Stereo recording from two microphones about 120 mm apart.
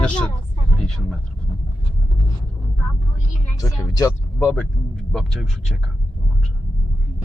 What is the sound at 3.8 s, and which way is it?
Speech, 25° left (ahead or behind).